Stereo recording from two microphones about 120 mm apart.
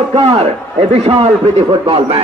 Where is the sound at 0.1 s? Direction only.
55° right (ahead or behind).